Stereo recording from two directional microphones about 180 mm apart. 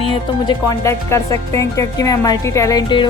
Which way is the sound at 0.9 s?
15° left (ahead or behind).